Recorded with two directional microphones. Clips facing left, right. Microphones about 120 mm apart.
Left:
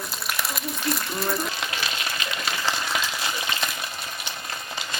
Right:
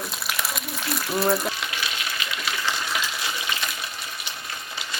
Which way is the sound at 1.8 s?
35° left (ahead or behind).